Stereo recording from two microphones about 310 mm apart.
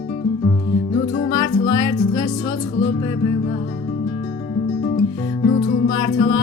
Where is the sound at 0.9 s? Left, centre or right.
Centre.